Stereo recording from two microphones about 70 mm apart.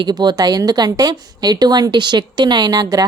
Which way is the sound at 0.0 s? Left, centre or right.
Right.